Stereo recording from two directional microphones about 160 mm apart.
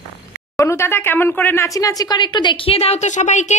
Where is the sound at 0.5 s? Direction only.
15° left (ahead or behind).